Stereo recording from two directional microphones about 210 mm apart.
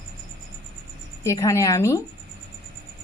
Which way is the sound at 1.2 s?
15° left (ahead or behind).